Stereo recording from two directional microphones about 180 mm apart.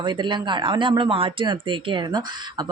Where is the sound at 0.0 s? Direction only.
25° right (ahead or behind).